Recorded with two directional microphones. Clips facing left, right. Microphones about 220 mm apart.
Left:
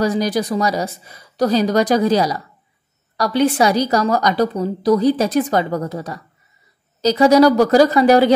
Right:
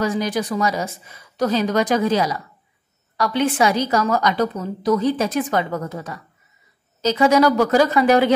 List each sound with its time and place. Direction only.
0.0 s a woman's voice: 35° left (ahead or behind)